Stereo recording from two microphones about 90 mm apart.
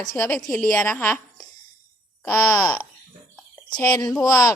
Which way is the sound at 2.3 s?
25° left (ahead or behind).